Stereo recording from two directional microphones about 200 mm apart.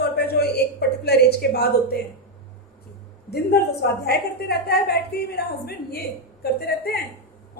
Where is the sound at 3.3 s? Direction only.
55° left (ahead or behind).